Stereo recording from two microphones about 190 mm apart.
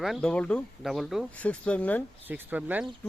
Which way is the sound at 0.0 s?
Centre (ahead or behind).